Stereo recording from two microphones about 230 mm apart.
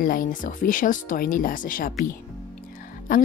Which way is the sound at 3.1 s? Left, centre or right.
Left.